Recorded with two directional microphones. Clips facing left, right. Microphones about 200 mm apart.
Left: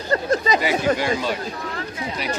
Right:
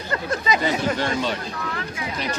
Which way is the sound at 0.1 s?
40° left (ahead or behind).